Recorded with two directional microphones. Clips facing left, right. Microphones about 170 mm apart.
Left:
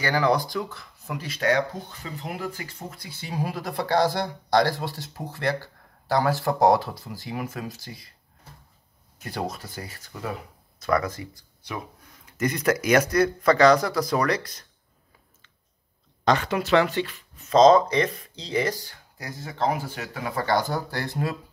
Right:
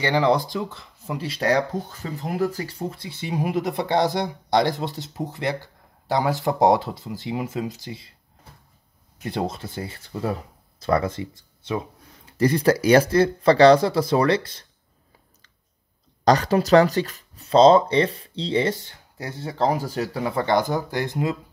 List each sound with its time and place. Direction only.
0.0 s speech: 25° right (ahead or behind)
9.2 s speech: 20° right (ahead or behind)
16.3 s speech: 35° right (ahead or behind); by 21.4 s 20° right (ahead or behind)